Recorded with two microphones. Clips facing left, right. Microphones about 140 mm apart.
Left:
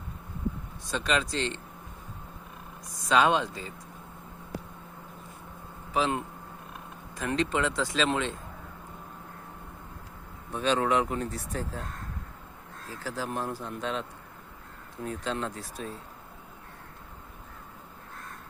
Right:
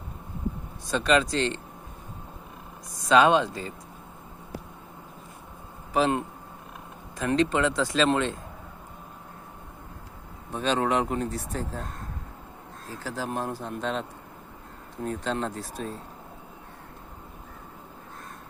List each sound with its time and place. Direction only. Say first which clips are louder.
0.9 s speech: right 6 dB; 40° right (ahead or behind)
3.1 s speech: right 4 dB; 40° right (ahead or behind)
5.9 s speech: right 4 dB; 45° right (ahead or behind)
10.5 s speech: right 1 dB; 30° right (ahead or behind)
13.1 s speech: right 2 dB; 25° right (ahead or behind)
15.0 s speech: right 3 dB; 40° right (ahead or behind)